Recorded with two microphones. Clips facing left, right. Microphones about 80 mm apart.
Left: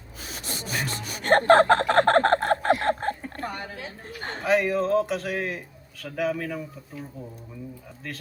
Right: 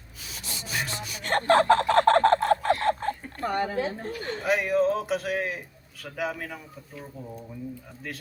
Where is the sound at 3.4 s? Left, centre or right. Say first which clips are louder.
Right 7 dB; right.